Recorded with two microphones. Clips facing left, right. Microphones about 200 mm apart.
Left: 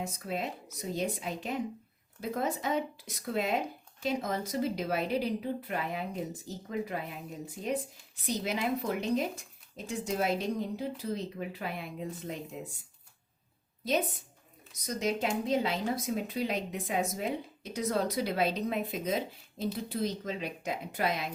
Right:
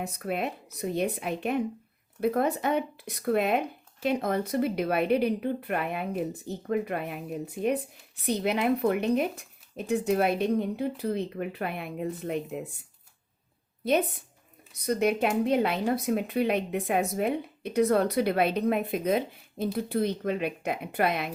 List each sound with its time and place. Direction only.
0.0 s speech: 60° right (ahead or behind)
13.8 s speech: 60° right (ahead or behind)